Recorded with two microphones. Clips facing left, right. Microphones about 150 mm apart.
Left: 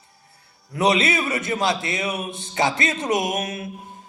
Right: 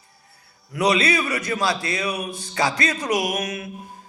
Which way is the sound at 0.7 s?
25° left (ahead or behind).